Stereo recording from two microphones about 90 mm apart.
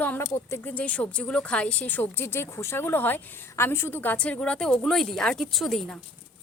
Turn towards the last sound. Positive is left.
turn(degrees=5)  # may be behind; listen again after turning